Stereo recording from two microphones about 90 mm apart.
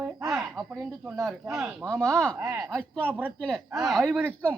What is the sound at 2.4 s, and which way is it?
Speech, 35° right (ahead or behind).